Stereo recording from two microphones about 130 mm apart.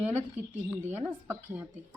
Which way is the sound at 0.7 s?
15° right (ahead or behind).